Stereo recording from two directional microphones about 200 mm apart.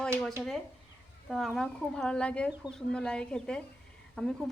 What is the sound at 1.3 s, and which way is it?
A woman's voice, centre (ahead or behind).